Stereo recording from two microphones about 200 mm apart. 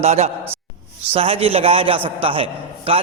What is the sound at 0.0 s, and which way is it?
A man's voice, 30° right (ahead or behind).